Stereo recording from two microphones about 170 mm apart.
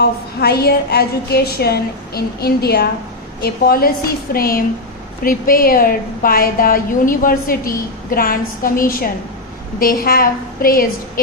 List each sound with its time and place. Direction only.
0.0 s a woman's voice: 70° left (ahead or behind)